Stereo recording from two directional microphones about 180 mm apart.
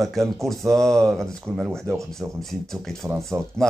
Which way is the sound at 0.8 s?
5° left (ahead or behind).